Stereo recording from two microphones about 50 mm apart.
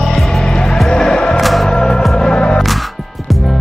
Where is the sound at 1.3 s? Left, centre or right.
Centre.